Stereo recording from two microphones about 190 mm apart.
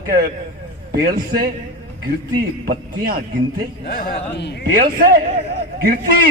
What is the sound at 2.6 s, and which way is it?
Speech, 50° right (ahead or behind).